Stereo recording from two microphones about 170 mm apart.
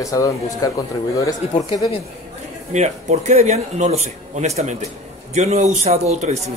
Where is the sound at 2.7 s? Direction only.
40° right (ahead or behind).